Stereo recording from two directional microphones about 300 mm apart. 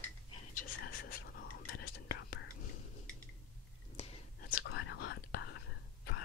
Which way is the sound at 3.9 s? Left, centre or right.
Centre.